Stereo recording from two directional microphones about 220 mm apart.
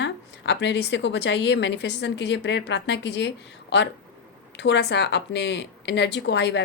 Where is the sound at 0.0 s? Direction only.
55° left (ahead or behind).